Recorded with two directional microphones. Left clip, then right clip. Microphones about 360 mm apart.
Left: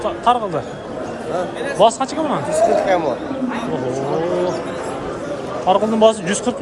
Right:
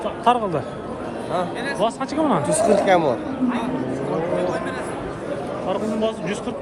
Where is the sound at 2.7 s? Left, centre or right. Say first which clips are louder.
Even; right.